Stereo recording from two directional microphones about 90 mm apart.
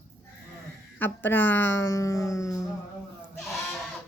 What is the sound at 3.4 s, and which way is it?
Bleat, 5° left (ahead or behind).